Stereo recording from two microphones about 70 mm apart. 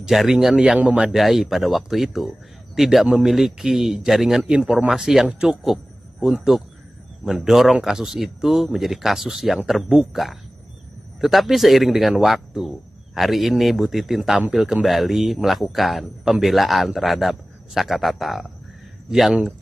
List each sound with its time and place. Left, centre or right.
0.0 s speech: centre
0.6 s a man's voice: centre
1.1 s speech: centre
4.9 s speech: centre
5.5 s a sound: centre
7.4 s speech: centre